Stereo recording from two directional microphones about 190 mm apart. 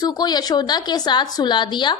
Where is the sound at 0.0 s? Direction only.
20° left (ahead or behind).